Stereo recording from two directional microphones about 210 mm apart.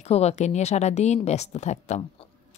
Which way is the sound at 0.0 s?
30° left (ahead or behind).